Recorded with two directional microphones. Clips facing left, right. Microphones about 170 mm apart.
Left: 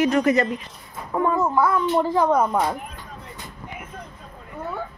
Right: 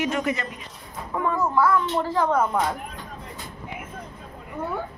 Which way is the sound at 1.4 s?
20° left (ahead or behind).